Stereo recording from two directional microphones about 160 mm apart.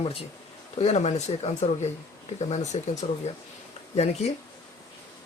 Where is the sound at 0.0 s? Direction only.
35° left (ahead or behind).